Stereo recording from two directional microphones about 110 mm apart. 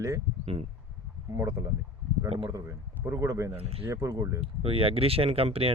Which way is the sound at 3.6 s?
60° right (ahead or behind).